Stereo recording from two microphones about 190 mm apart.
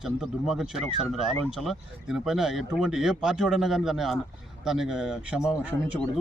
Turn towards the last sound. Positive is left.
turn(degrees=-5)  # may be behind; listen again after turning